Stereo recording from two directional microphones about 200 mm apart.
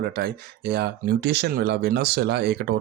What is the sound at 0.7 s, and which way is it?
Speech, 55° right (ahead or behind).